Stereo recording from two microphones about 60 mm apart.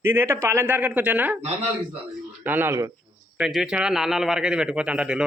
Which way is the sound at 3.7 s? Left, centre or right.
Centre.